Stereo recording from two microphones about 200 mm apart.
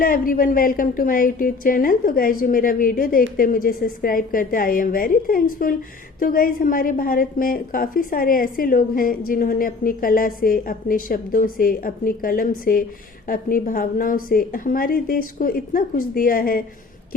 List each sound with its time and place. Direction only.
0.0 s a woman's voice: 45° left (ahead or behind)